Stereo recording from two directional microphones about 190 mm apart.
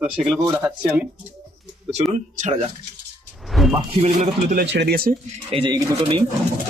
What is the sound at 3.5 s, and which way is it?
Music, centre (ahead or behind).